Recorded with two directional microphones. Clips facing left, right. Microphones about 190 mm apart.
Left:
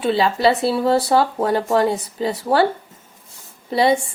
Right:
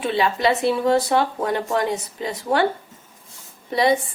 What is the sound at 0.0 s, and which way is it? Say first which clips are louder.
Speech: left 3 dB; 30° left (ahead or behind).